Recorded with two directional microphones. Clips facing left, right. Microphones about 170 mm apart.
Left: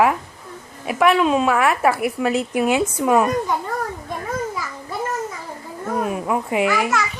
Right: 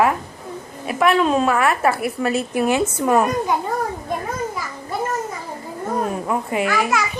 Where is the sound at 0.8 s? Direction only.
15° left (ahead or behind).